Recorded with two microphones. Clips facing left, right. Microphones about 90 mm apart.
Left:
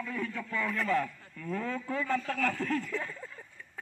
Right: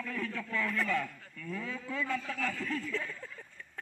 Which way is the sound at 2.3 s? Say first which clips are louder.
Left 5 dB; 55° left (ahead or behind).